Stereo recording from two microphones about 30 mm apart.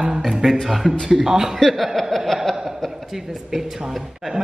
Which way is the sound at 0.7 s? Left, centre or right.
Centre.